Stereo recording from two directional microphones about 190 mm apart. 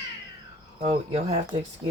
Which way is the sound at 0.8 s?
35° right (ahead or behind).